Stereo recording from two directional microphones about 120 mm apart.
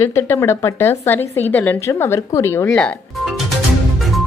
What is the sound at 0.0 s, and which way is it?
Speech, 20° left (ahead or behind).